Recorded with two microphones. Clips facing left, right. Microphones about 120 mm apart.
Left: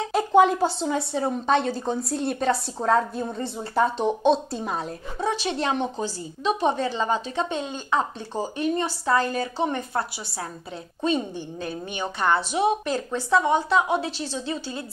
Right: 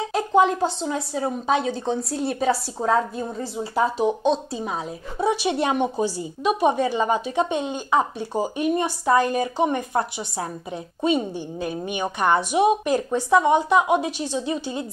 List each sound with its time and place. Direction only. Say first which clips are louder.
0.0 s a woman's voice: left 1 dB; centre (ahead or behind)
5.2 s speech: right 4 dB; 15° right (ahead or behind)